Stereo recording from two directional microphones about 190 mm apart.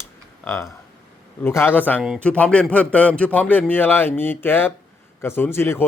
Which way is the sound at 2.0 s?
Centre (ahead or behind).